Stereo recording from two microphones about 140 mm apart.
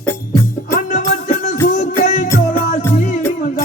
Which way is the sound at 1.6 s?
65° left (ahead or behind).